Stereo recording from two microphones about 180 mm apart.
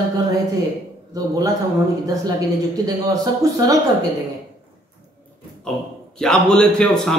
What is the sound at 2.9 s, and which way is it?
Speech, 20° right (ahead or behind).